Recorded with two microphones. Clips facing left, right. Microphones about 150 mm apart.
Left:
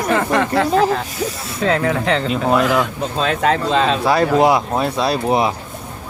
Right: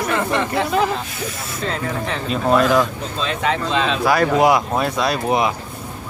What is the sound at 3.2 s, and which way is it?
Speech, 50° left (ahead or behind).